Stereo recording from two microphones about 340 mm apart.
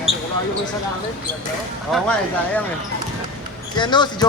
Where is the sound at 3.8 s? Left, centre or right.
Centre.